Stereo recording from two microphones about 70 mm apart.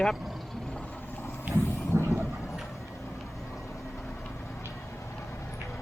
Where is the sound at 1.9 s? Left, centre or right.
Right.